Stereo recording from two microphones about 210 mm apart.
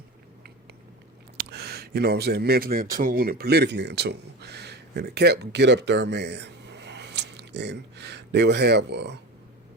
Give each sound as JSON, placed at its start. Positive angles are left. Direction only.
{"t": 1.4, "sound": "speech", "side_deg": -50}